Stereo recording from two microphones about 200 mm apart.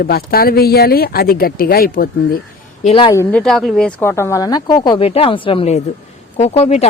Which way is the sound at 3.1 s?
10° left (ahead or behind).